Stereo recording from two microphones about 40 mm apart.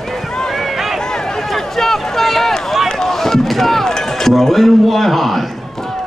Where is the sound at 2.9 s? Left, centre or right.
Centre.